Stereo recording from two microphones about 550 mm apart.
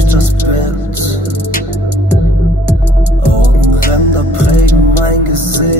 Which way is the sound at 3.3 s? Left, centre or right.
Right.